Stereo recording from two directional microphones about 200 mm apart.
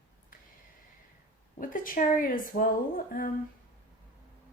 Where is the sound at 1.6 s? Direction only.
45° left (ahead or behind).